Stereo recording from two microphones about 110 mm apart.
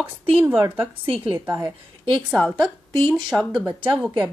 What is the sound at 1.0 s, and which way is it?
Speech, 55° right (ahead or behind).